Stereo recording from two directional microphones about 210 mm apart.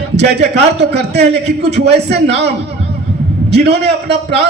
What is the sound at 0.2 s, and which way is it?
Speech, 55° right (ahead or behind).